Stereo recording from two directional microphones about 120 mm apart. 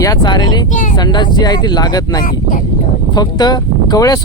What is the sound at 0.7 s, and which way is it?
Speech, 90° left.